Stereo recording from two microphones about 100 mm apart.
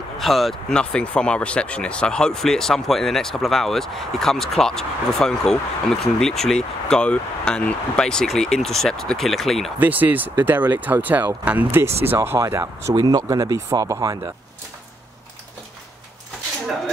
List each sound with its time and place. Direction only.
0.2 s speech: centre (ahead or behind)
9.8 s speech: 15° right (ahead or behind)
12.9 s speech: 40° right (ahead or behind)